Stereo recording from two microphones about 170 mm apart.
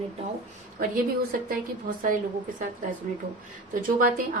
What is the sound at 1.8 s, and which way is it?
Speech, 55° right (ahead or behind).